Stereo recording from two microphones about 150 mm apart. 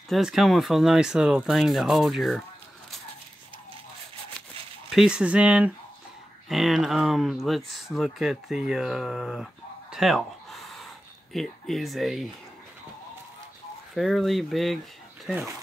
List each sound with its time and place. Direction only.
0.1 s speech: centre (ahead or behind)
4.8 s speech: 5° right (ahead or behind)
13.9 s speech: centre (ahead or behind)